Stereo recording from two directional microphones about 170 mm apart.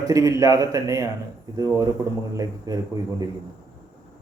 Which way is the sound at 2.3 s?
20° right (ahead or behind).